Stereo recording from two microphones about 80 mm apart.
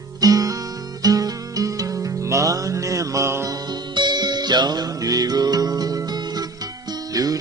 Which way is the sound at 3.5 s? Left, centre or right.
Right.